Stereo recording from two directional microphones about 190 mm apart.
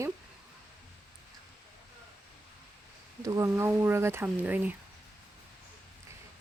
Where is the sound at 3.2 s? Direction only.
15° right (ahead or behind).